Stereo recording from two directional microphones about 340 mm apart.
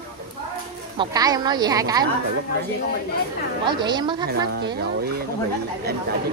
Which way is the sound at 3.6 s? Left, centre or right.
Centre.